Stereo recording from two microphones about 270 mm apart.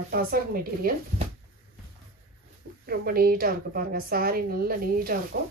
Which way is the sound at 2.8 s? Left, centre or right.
Right.